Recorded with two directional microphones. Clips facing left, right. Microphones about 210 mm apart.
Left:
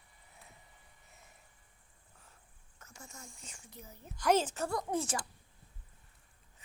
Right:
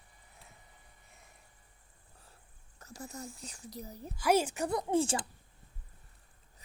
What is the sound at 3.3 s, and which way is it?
Child singing, 35° right (ahead or behind).